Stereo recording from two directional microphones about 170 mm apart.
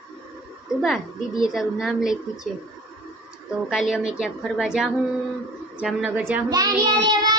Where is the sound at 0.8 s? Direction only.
Centre (ahead or behind).